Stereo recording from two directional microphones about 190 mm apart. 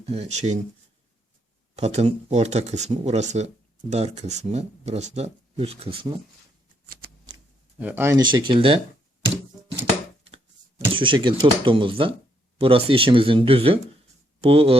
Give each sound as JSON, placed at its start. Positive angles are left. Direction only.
{"t": 0.0, "sound": "speech", "side_deg": -30}
{"t": 1.7, "sound": "speech", "side_deg": -35}
{"t": 7.8, "sound": "speech", "side_deg": -10}
{"t": 10.3, "sound": "speech", "side_deg": -30}